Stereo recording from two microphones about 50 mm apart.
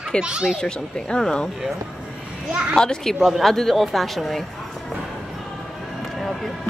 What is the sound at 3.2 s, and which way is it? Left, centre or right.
Speech, centre.